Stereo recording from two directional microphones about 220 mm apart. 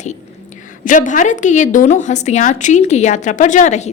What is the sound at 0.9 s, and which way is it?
A woman's voice, 35° left (ahead or behind).